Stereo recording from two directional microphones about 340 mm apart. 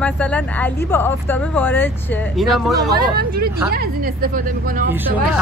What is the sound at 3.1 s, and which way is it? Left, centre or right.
A woman's voice, right.